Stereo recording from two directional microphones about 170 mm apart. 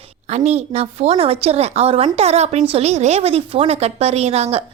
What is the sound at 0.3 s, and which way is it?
A woman's voice, 40° right (ahead or behind).